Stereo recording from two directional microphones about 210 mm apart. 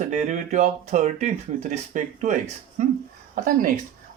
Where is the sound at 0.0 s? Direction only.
35° right (ahead or behind).